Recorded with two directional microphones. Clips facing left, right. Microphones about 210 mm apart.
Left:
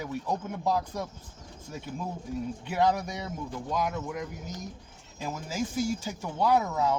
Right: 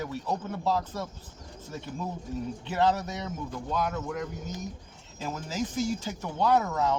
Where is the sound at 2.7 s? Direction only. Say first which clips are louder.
Even; 10° left (ahead or behind).